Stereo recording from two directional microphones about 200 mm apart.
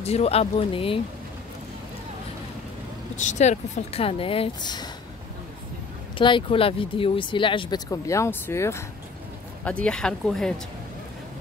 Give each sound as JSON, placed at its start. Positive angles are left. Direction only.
{"t": 0.0, "sound": "speech", "side_deg": 30}
{"t": 3.2, "sound": "speech", "side_deg": 35}
{"t": 6.1, "sound": "speech", "side_deg": 25}